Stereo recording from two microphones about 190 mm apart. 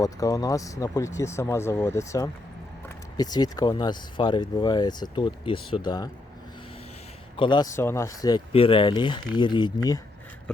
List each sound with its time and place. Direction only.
0.0 s speech: 20° left (ahead or behind)
7.3 s speech: 25° left (ahead or behind)